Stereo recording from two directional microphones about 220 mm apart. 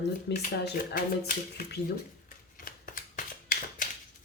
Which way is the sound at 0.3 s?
50° left (ahead or behind).